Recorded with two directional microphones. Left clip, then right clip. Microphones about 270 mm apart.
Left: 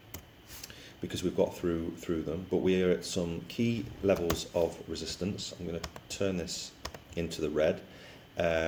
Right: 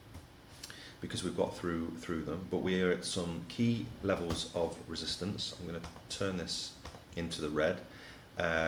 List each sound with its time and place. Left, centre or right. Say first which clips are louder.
0.6 s speech: left 3 dB; left